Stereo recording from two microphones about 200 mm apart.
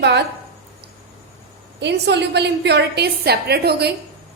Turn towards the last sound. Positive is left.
turn(degrees=-55)  # may be behind; listen again after turning